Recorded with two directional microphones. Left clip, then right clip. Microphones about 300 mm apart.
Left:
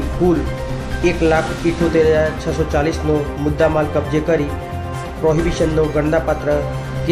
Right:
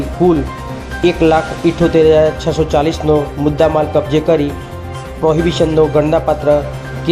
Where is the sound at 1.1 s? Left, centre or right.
Centre.